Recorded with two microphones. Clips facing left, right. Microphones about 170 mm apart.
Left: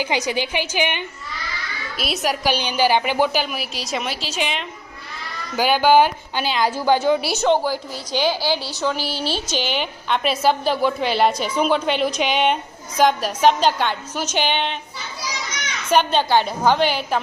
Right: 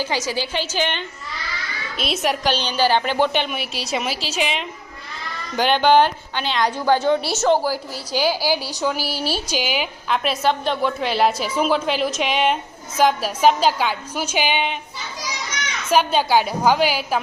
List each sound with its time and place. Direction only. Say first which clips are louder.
0.0 s a woman's voice: left 1 dB; 15° left (ahead or behind)
2.0 s a woman's voice: right 1 dB; centre (ahead or behind)
2.5 s a woman's voice: left 1 dB; 10° left (ahead or behind); by 14.8 s 10° right (ahead or behind)
15.9 s a woman's voice: even; 5° right (ahead or behind)